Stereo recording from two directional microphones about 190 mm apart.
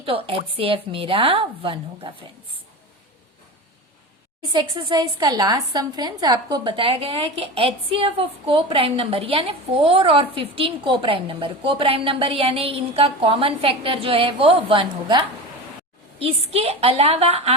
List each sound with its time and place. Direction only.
0.0 s a woman's voice: 30° right (ahead or behind)
4.5 s a woman's voice: 25° right (ahead or behind)